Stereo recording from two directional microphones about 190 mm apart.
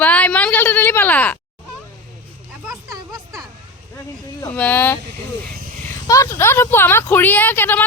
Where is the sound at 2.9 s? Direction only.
20° right (ahead or behind).